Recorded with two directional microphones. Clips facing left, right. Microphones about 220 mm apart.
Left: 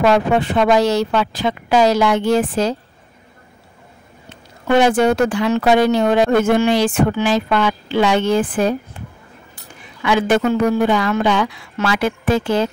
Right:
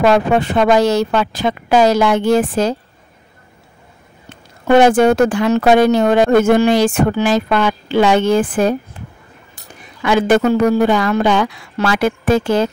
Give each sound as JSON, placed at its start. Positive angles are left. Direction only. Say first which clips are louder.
{"t": 0.0, "sound": "speech", "louder": "right 2 dB", "side_deg": -45}
{"t": 4.3, "sound": "speech", "louder": "right 4 dB", "side_deg": -50}
{"t": 10.0, "sound": "speech", "louder": "right 3 dB", "side_deg": -45}